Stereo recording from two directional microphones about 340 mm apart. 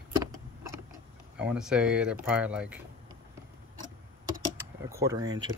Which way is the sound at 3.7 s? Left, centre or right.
Right.